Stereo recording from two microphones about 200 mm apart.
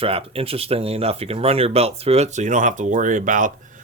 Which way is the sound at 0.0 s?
30° right (ahead or behind).